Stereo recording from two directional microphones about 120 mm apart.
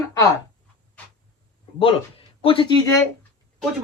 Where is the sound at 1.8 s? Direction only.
50° left (ahead or behind).